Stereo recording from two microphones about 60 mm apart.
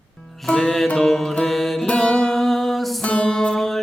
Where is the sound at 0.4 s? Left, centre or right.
Centre.